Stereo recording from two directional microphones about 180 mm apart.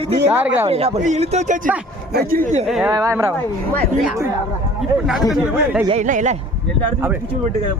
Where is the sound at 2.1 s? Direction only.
55° right (ahead or behind).